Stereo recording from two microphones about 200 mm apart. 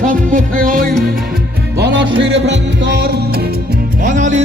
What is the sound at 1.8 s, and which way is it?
Music, 60° right (ahead or behind).